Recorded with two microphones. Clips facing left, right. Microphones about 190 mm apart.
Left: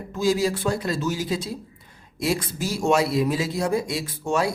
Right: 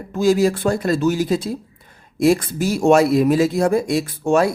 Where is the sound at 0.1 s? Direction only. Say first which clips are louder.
Right 6 dB; 55° right (ahead or behind).